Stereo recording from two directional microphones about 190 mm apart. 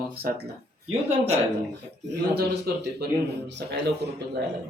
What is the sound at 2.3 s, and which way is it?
Speech, 55° right (ahead or behind).